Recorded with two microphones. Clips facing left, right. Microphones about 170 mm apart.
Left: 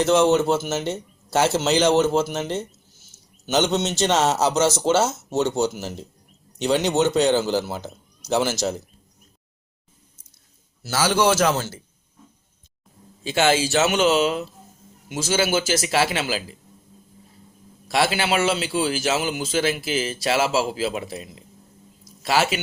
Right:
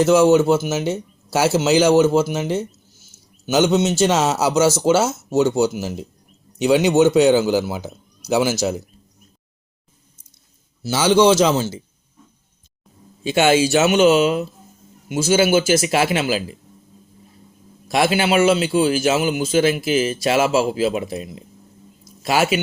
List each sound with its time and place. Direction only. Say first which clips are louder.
0.0 s a man's voice: right 4 dB; 5° right (ahead or behind)
10.8 s speech: right 6 dB; 20° right (ahead or behind)
13.2 s speech: right 4 dB; 15° right (ahead or behind)
17.8 s speech: right 4 dB; 15° right (ahead or behind)